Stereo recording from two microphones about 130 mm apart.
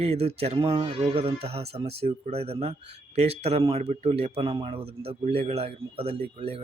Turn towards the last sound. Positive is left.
turn(degrees=-50)  # may be behind; listen again after turning